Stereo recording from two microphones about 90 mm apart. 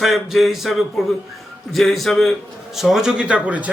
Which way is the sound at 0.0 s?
5° right (ahead or behind).